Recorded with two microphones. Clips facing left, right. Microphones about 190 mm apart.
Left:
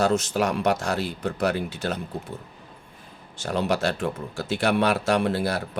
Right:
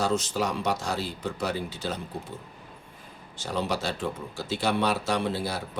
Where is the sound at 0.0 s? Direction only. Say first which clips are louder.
Left 4 dB; 65° left (ahead or behind).